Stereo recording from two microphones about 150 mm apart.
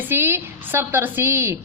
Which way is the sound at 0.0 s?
15° right (ahead or behind).